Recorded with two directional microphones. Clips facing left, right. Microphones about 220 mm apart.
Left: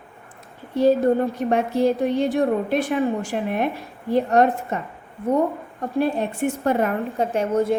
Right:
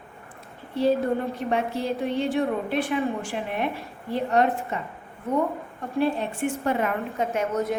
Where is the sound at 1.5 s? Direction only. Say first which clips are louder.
Left 6 dB; 45° left (ahead or behind).